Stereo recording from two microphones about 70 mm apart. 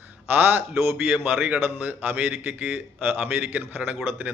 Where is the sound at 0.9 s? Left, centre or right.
Right.